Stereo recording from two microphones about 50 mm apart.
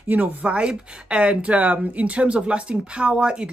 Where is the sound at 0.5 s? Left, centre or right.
Right.